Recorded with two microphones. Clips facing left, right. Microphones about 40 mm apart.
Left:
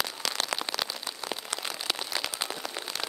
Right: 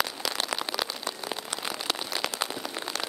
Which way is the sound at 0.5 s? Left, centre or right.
Centre.